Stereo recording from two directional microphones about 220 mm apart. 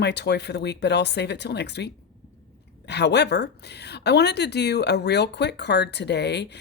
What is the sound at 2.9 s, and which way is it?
Speech, 50° left (ahead or behind).